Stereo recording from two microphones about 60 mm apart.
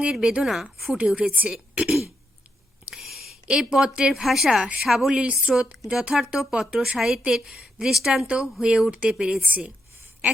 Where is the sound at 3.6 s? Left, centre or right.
Centre.